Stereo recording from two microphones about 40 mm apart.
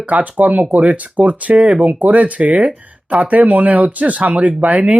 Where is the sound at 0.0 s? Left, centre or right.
Right.